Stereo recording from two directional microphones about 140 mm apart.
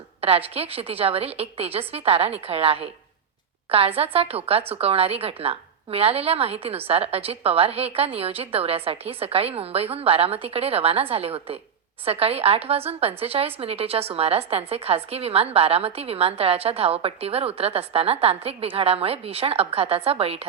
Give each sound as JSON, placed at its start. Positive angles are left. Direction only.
{"t": 0.2, "sound": "a woman's voice", "side_deg": -45}